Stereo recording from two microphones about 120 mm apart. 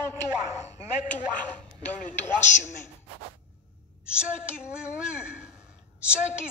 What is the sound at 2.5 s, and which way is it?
Speech, 90° left.